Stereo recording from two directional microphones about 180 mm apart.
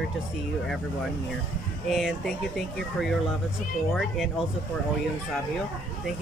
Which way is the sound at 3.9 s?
Centre (ahead or behind).